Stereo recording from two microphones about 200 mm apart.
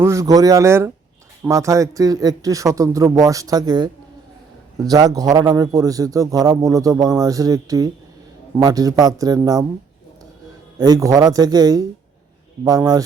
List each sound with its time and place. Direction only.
0.0 s a man's voice: 15° right (ahead or behind)
10.8 s a man's voice: 20° right (ahead or behind)